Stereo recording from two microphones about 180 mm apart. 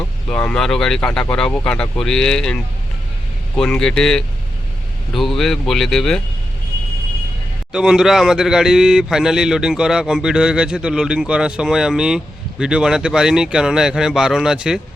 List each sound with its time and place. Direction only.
0.3 s a man's voice: 5° left (ahead or behind)
3.6 s a man's voice: 5° left (ahead or behind)
7.7 s a man's voice: 5° right (ahead or behind)